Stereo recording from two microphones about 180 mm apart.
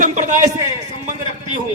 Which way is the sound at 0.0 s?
40° right (ahead or behind).